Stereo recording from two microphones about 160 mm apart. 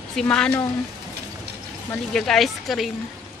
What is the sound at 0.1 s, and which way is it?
Speech, 5° left (ahead or behind).